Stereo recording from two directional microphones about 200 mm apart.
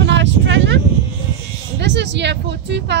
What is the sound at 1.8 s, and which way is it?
Speech, 60° right (ahead or behind).